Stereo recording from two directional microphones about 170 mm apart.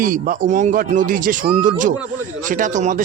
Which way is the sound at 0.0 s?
55° right (ahead or behind).